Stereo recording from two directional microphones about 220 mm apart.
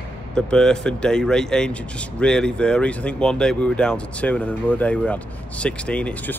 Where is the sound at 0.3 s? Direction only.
5° left (ahead or behind).